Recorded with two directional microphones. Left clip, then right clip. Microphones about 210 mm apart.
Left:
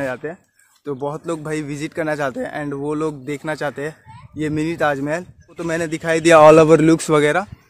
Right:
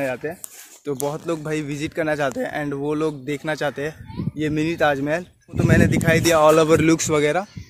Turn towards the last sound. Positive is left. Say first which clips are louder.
# left 4 dB
turn(degrees=15)  # may be behind; listen again after turning